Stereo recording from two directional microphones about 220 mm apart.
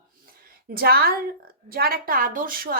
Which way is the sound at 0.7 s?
45° right (ahead or behind).